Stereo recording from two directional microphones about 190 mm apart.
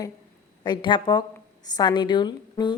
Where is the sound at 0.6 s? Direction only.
25° left (ahead or behind).